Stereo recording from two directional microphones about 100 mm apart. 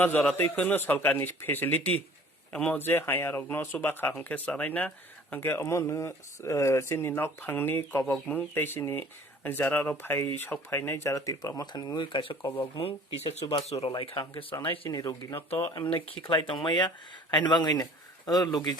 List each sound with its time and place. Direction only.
0.0 s speech: 15° left (ahead or behind); by 12.5 s 55° left (ahead or behind)
12.8 s speech: 80° left
13.4 s speech: 75° left (ahead or behind)
14.0 s speech: 65° left (ahead or behind)
14.8 s speech: 35° left (ahead or behind)
16.0 s speech: 60° left (ahead or behind)